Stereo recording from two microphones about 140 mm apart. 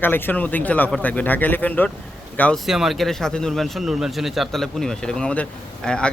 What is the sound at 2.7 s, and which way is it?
Speech, centre (ahead or behind).